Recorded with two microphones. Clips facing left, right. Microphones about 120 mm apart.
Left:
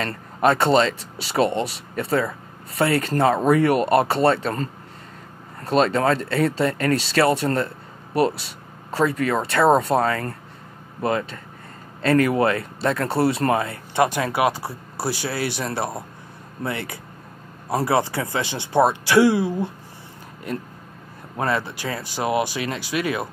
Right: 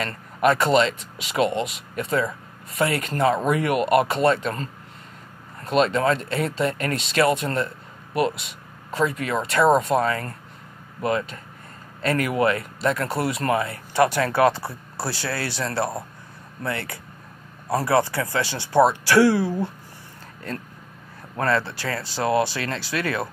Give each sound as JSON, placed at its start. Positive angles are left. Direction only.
{"t": 0.0, "sound": "speech", "side_deg": 30}
{"t": 21.4, "sound": "speech", "side_deg": 15}